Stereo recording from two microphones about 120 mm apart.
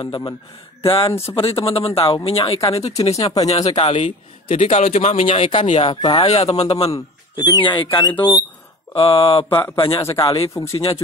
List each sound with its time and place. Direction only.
0.0 s a man's voice: 45° left (ahead or behind)
3.0 s speech: 30° left (ahead or behind)
3.6 s a man's voice: 65° left (ahead or behind)
5.9 s speech: 40° left (ahead or behind)
6.2 s a man's voice: 55° left (ahead or behind)
6.9 s speech: 35° left (ahead or behind)
8.9 s speech: 55° left (ahead or behind)
9.9 s speech: 35° left (ahead or behind)